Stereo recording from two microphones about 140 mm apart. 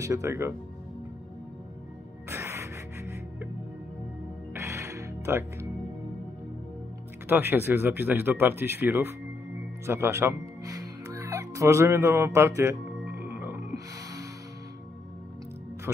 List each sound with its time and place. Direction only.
0.0 s speech: 20° right (ahead or behind)
2.2 s music: 20° right (ahead or behind)
4.6 s music: 20° right (ahead or behind)
7.2 s speech: 15° right (ahead or behind)
9.8 s music: 20° right (ahead or behind)